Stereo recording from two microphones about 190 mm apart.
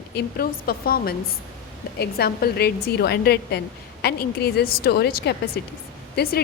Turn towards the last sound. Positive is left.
turn(degrees=55)  # may be behind; listen again after turning